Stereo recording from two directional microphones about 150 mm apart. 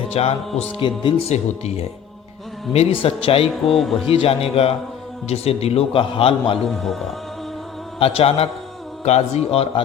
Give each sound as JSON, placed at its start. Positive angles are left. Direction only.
{"t": 0.1, "sound": "speech", "side_deg": 45}
{"t": 3.5, "sound": "speech", "side_deg": 0}
{"t": 4.0, "sound": "speech", "side_deg": 40}
{"t": 6.7, "sound": "speech", "side_deg": 0}
{"t": 7.9, "sound": "a man's voice", "side_deg": 40}